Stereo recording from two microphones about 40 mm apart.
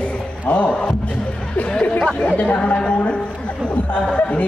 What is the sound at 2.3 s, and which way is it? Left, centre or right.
Speech, left.